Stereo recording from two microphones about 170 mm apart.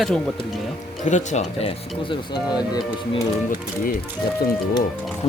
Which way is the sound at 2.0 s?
25° left (ahead or behind).